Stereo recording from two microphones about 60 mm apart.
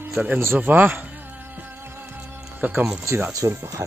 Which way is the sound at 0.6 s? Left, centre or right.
Right.